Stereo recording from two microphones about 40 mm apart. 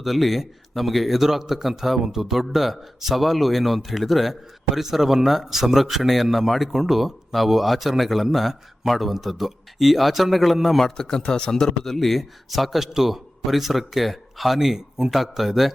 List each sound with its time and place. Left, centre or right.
0.0 s speech: centre
10.8 s speech: centre
11.9 s speech: centre